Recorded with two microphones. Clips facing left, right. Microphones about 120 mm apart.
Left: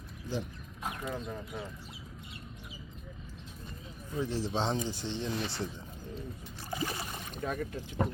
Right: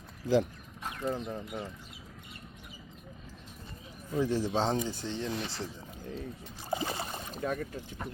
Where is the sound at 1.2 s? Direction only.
60° right (ahead or behind).